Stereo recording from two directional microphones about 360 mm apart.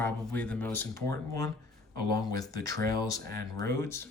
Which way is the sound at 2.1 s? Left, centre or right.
Centre.